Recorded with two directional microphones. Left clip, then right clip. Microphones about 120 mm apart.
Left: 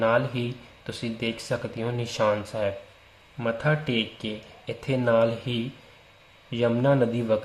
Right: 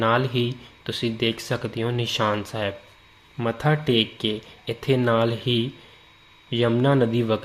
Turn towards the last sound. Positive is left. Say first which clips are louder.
# right 1 dB
turn(degrees=-20)  # may be behind; listen again after turning